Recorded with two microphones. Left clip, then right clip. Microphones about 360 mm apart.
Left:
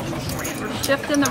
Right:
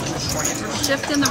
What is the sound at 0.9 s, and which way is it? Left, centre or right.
Speech, centre.